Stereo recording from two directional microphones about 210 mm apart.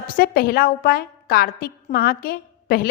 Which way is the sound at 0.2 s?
45° left (ahead or behind).